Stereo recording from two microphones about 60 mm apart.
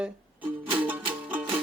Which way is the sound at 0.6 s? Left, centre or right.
Right.